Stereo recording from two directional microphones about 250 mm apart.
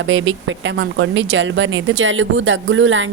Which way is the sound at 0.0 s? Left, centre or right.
Right.